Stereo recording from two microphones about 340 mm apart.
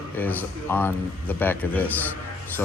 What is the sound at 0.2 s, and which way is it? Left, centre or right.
A man's voice, centre.